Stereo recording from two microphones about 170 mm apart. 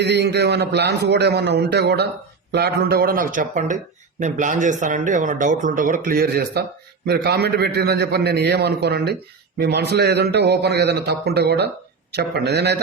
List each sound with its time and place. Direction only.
0.0 s a man's voice: 85° right